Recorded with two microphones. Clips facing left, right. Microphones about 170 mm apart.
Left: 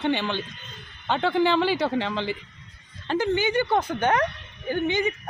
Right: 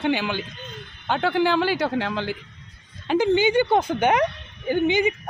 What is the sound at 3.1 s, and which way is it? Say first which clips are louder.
Speech: right 4 dB; 15° right (ahead or behind).